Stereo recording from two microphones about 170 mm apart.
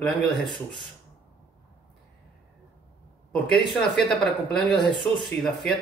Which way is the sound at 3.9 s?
5° left (ahead or behind).